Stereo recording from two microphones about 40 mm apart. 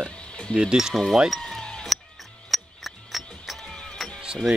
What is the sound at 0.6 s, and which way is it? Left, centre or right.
Speech, centre.